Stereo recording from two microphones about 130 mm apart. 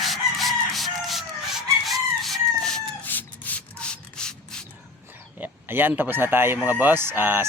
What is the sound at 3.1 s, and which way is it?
Rub, 15° left (ahead or behind).